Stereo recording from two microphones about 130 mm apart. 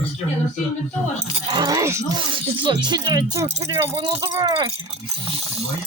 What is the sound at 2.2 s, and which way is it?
Speech, 40° right (ahead or behind).